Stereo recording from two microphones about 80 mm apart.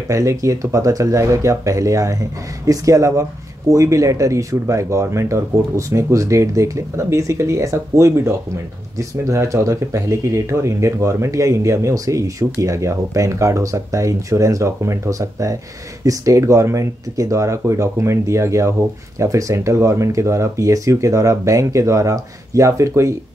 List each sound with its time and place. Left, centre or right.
0.1 s speech: right